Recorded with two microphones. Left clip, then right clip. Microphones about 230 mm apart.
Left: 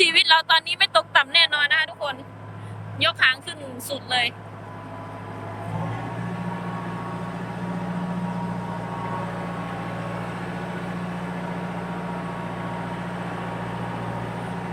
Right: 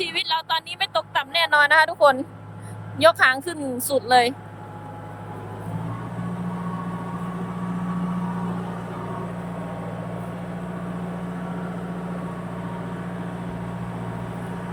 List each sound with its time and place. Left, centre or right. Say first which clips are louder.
0.0 s a woman's voice: left 8 dB; centre; by 4.2 s right